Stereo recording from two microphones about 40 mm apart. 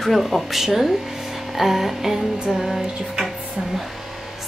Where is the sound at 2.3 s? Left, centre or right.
Centre.